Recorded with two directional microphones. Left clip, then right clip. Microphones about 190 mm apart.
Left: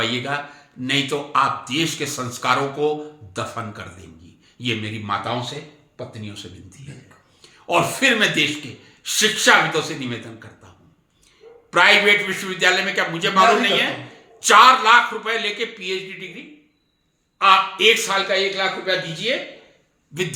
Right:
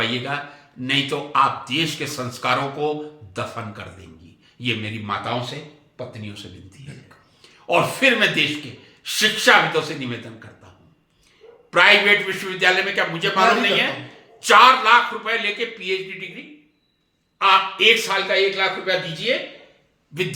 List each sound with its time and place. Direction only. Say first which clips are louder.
0.0 s a man's voice: left 1 dB; 20° left (ahead or behind)
11.7 s a man's voice: even; 20° left (ahead or behind)
17.3 s a man's voice: left 1 dB; 20° left (ahead or behind)